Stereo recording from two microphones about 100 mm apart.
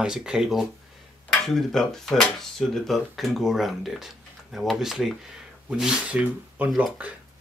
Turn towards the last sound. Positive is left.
turn(degrees=-15)  # may be behind; listen again after turning